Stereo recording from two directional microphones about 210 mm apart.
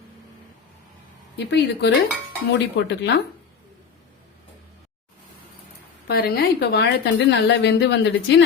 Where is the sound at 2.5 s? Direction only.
55° left (ahead or behind).